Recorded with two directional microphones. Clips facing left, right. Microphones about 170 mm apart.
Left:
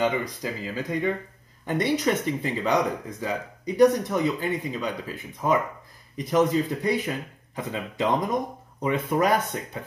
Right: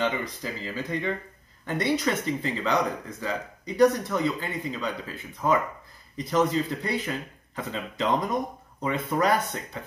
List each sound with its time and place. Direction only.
0.0 s speech: 15° left (ahead or behind)